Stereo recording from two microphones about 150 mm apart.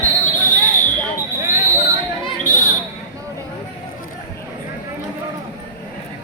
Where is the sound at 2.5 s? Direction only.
55° left (ahead or behind).